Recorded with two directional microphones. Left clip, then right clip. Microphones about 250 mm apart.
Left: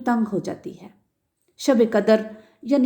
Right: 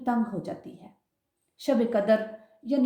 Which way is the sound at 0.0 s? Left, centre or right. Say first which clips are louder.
Left 6 dB; left.